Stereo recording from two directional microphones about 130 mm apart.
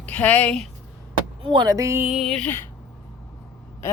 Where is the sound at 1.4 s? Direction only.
35° right (ahead or behind).